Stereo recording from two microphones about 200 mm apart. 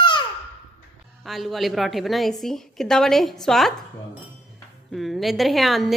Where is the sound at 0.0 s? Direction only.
25° left (ahead or behind).